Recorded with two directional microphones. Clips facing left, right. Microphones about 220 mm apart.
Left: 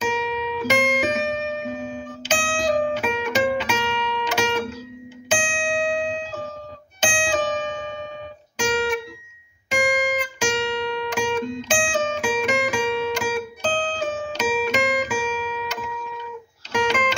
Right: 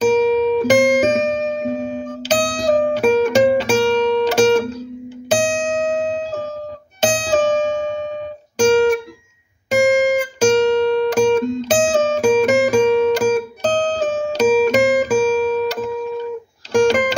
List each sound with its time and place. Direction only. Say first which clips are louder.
0.0 s music: right 12 dB; 45° right (ahead or behind)